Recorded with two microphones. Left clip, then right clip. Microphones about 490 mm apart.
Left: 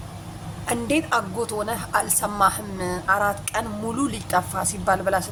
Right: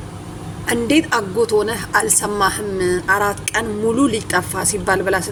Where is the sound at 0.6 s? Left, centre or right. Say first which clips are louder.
Right 7 dB; left.